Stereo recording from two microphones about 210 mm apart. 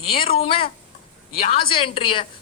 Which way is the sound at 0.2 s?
25° left (ahead or behind).